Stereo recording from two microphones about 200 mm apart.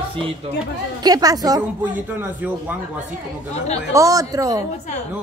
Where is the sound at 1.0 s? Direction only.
20° right (ahead or behind).